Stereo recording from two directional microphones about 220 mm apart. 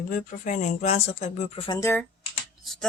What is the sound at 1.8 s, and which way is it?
Speech, 10° left (ahead or behind).